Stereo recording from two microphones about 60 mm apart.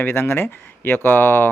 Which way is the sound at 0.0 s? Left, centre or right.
Left.